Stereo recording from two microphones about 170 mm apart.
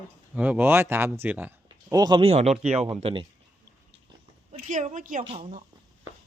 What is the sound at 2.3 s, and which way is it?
Speech, 40° right (ahead or behind).